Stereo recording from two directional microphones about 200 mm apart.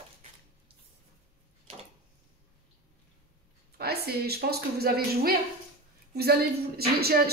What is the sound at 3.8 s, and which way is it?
A woman's voice, 50° right (ahead or behind).